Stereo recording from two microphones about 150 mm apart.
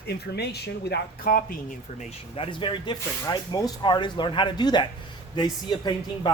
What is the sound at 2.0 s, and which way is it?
Speech, 40° left (ahead or behind).